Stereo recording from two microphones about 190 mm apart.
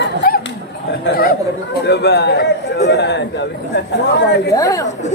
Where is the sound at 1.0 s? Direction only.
50° left (ahead or behind).